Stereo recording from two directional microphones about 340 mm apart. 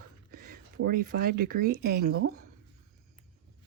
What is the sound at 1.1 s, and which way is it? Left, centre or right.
Speech, right.